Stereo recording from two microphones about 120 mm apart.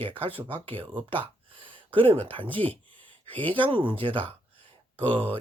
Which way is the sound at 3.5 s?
45° right (ahead or behind).